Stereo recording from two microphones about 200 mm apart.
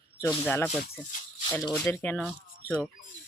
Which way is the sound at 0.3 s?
10° left (ahead or behind).